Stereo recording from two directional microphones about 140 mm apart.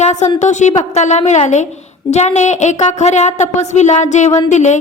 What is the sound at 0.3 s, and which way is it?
Speech, 60° left (ahead or behind).